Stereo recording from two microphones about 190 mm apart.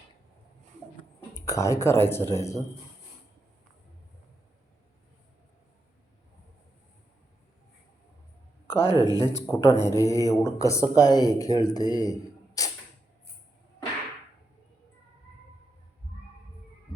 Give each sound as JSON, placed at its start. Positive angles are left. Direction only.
{"t": 1.4, "sound": "speech", "side_deg": 15}
{"t": 8.6, "sound": "a sound", "side_deg": 15}
{"t": 9.0, "sound": "speech", "side_deg": -20}
{"t": 9.2, "sound": "speech", "side_deg": 15}